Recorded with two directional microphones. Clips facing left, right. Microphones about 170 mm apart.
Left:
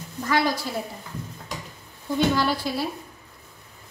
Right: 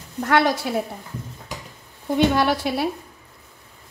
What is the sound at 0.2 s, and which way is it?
Speech, 65° right (ahead or behind).